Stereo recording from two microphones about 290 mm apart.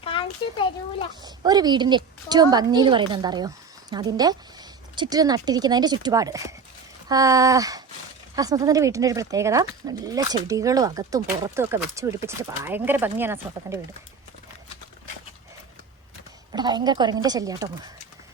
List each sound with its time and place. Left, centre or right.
0.0 s a sound: centre
1.2 s speech: centre
16.5 s speech: centre